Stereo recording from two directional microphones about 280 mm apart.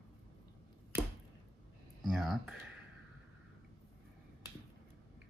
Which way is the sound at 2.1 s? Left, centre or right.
Centre.